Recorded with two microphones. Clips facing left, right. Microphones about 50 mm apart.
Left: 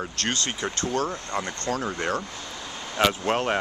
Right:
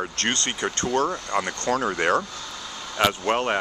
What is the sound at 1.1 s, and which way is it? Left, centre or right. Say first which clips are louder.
Speech: right 4 dB; right.